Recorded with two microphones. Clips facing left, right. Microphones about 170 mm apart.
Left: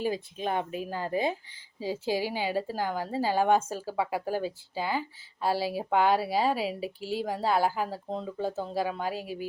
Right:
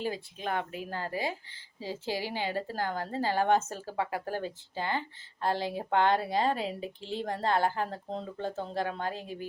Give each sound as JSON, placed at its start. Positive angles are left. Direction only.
{"t": 0.0, "sound": "speech", "side_deg": 20}